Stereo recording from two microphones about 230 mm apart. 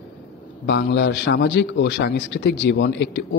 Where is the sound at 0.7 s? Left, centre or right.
Left.